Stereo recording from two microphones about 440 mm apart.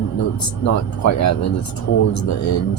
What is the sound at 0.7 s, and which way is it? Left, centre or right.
Speech, left.